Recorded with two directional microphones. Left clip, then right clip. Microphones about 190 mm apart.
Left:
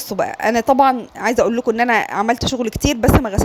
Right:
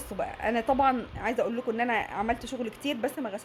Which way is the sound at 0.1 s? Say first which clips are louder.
Left 12 dB; 40° left (ahead or behind).